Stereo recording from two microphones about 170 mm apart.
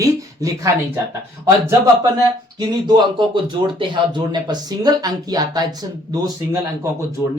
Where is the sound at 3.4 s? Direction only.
25° right (ahead or behind).